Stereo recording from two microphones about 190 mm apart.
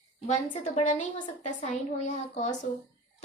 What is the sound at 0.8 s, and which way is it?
A woman's voice, 40° left (ahead or behind).